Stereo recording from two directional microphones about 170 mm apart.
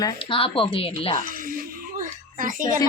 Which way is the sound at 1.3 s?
55° right (ahead or behind).